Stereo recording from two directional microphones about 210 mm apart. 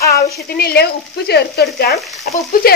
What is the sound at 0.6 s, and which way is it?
A woman's voice, 50° left (ahead or behind).